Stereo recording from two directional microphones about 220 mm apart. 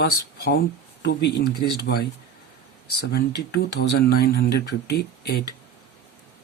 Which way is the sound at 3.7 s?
50° left (ahead or behind).